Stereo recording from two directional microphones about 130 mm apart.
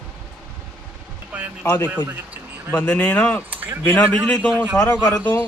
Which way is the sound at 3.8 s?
15° left (ahead or behind).